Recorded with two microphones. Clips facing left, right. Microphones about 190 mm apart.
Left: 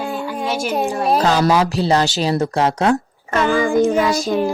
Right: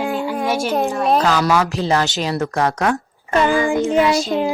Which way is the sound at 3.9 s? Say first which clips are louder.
Right 1 dB; 15° right (ahead or behind).